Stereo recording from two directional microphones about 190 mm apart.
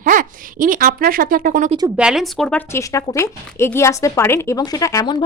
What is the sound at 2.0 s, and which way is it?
Speech, 5° right (ahead or behind).